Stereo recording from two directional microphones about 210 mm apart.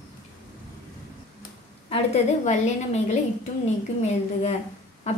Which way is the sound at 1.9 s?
35° left (ahead or behind).